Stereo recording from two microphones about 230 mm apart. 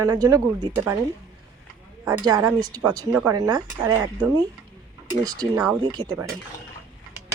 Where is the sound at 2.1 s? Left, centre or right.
Centre.